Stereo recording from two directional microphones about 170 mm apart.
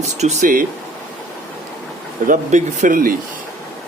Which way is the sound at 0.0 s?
40° right (ahead or behind).